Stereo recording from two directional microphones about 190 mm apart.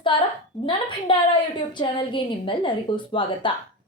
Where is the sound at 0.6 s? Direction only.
25° left (ahead or behind).